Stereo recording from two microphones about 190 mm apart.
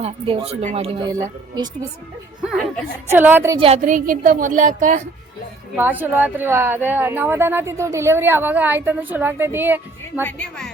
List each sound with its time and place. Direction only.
0.0 s a woman's voice: 30° right (ahead or behind)
2.4 s speech: 5° right (ahead or behind)
3.6 s a woman's voice: 35° right (ahead or behind)
5.7 s speech: 10° right (ahead or behind)
10.2 s speech: 10° left (ahead or behind)